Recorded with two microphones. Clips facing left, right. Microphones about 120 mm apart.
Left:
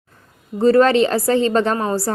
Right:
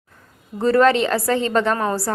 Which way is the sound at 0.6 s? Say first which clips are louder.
Left 3 dB; 30° left (ahead or behind).